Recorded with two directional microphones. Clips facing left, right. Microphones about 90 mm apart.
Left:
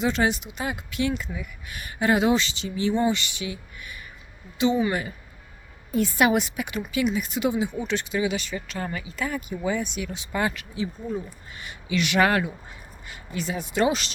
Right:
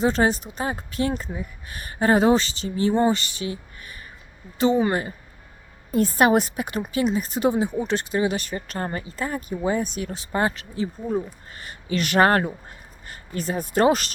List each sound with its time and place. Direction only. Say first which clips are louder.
0.0 s speech: right 3 dB; 40° right (ahead or behind)